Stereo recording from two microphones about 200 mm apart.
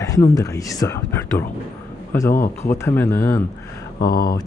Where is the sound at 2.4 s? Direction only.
40° left (ahead or behind).